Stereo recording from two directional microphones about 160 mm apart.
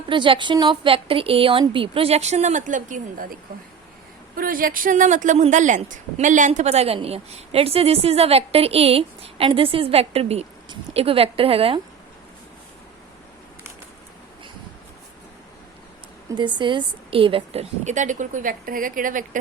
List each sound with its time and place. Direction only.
0.1 s a woman's voice: 30° right (ahead or behind); by 3.3 s 55° right (ahead or behind)
4.4 s a woman's voice: 60° right (ahead or behind); by 11.8 s 35° right (ahead or behind)
16.3 s a woman's voice: 30° right (ahead or behind); by 19.4 s 55° right (ahead or behind)